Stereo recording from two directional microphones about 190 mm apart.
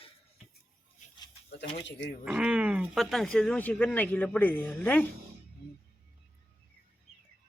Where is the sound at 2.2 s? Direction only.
5° right (ahead or behind).